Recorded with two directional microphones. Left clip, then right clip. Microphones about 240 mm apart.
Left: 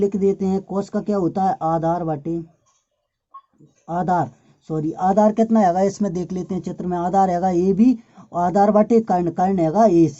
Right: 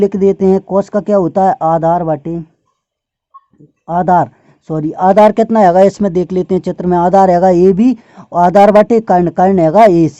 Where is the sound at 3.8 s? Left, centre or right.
Right.